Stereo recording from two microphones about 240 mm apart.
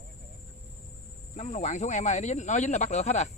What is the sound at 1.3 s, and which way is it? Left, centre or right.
Speech, left.